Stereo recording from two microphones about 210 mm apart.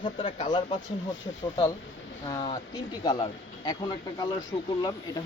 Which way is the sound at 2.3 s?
20° left (ahead or behind).